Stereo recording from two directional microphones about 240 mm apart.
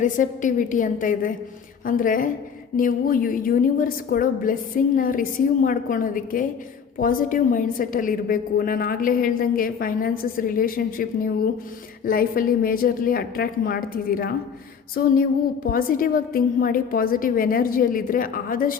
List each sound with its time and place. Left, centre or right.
0.0 s a woman's voice: left